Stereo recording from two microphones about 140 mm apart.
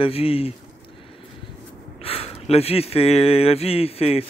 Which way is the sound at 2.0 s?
45° left (ahead or behind).